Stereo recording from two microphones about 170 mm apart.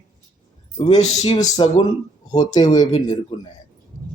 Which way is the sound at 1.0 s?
30° left (ahead or behind).